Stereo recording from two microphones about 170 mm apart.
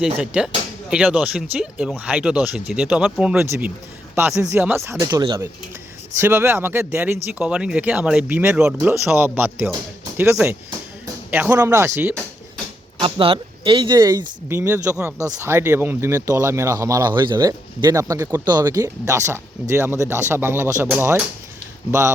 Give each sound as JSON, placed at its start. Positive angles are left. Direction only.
{"t": 0.0, "sound": "speech", "side_deg": -5}
{"t": 13.0, "sound": "speech", "side_deg": -30}
{"t": 14.5, "sound": "speech", "side_deg": -15}